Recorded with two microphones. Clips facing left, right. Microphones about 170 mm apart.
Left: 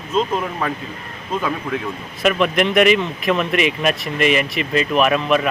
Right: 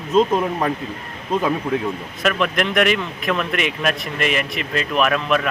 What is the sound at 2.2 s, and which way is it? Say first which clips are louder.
Speech: left 3 dB; centre (ahead or behind).